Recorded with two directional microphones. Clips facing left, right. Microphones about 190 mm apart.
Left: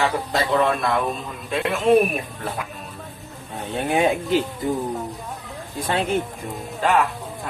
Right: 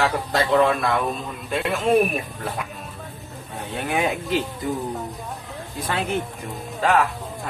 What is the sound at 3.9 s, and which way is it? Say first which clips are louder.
Speech: left 4 dB; 25° left (ahead or behind).